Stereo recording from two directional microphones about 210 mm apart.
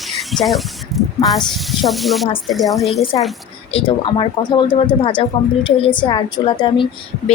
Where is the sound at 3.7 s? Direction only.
25° left (ahead or behind).